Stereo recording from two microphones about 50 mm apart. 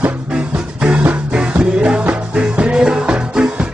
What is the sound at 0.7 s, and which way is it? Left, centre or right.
Music, right.